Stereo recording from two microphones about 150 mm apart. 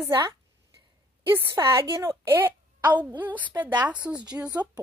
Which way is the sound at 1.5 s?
15° right (ahead or behind).